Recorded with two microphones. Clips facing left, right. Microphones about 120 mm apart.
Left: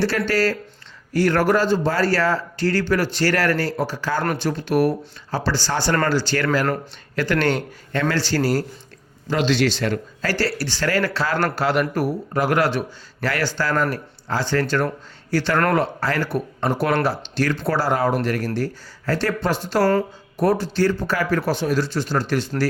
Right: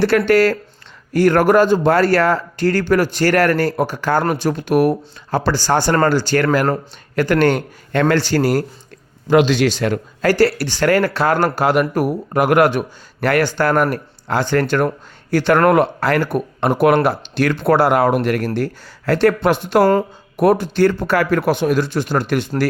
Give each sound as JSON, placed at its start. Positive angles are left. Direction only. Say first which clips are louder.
{"t": 0.0, "sound": "speech", "louder": "right 7 dB", "side_deg": -55}
{"t": 19.8, "sound": "speech", "louder": "right 3 dB", "side_deg": -25}
{"t": 20.3, "sound": "speech", "louder": "right 5 dB", "side_deg": -60}